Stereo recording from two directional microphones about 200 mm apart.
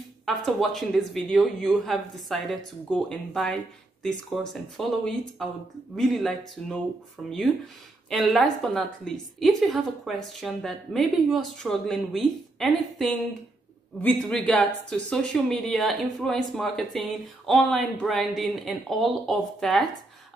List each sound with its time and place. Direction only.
0.5 s a woman's voice: centre (ahead or behind)